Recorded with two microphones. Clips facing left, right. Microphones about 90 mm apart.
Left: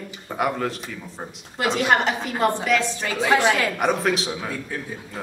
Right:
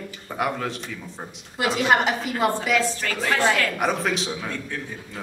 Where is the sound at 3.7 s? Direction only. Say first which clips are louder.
Left 2 dB; centre (ahead or behind).